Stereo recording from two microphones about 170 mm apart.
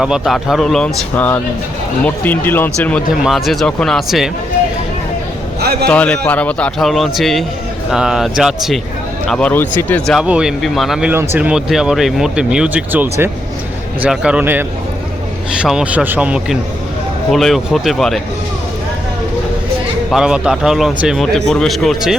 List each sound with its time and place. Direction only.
0.0 s a man's voice: centre (ahead or behind)
3.2 s a man's voice: centre (ahead or behind)
5.5 s a man's voice: 70° right (ahead or behind)
5.9 s a man's voice: 10° left (ahead or behind)
10.1 s a man's voice: 5° right (ahead or behind)
11.1 s a man's voice: 15° right (ahead or behind)
20.1 s a man's voice: 5° right (ahead or behind)